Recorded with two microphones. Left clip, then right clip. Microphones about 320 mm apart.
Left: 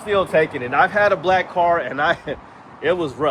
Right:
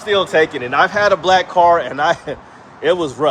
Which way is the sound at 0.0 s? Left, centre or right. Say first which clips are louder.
Right 3 dB; centre.